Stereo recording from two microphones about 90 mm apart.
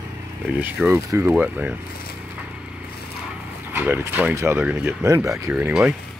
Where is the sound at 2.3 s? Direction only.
15° right (ahead or behind).